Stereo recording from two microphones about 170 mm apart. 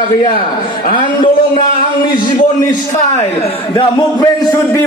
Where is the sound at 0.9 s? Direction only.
30° left (ahead or behind).